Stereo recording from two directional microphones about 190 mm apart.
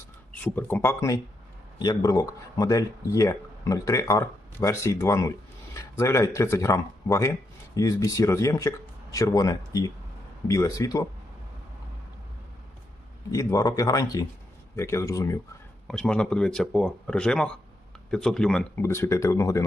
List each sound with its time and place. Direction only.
0.3 s speech: 10° left (ahead or behind)
13.3 s speech: 20° left (ahead or behind)
15.9 s speech: 5° left (ahead or behind)